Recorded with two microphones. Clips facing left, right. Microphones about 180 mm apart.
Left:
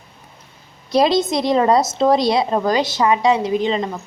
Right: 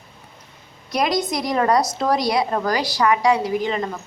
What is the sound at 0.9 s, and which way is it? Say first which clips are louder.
A woman's voice: left 6 dB; 30° left (ahead or behind).